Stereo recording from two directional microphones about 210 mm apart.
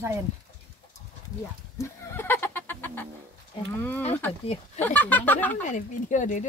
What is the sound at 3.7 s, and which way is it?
Speech, 10° left (ahead or behind).